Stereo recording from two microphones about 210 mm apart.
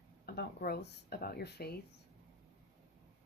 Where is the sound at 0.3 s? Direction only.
50° left (ahead or behind).